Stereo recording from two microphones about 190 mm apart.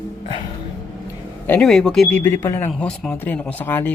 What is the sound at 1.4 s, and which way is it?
Speech, 5° left (ahead or behind).